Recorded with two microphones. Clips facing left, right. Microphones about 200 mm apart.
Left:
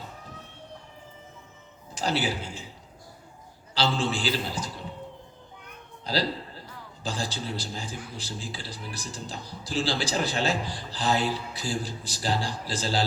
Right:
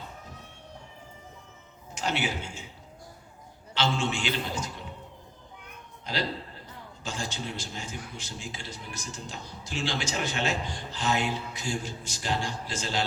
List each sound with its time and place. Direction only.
2.0 s speech: 35° left (ahead or behind)
3.8 s a man's voice: 35° left (ahead or behind)
6.1 s a man's voice: 35° left (ahead or behind)